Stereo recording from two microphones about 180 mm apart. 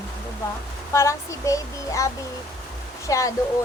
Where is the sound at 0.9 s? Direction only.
15° left (ahead or behind).